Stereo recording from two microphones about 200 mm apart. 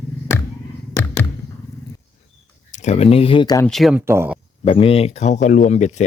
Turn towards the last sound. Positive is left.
turn(degrees=35)  # may be behind; listen again after turning